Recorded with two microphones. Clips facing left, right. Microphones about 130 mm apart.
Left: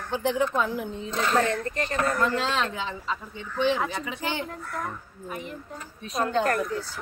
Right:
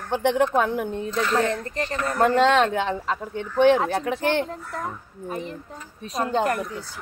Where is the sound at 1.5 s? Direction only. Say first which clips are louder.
Right 1 dB; 30° right (ahead or behind).